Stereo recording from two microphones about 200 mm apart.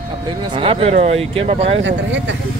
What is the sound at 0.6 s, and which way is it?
Speech, 30° right (ahead or behind).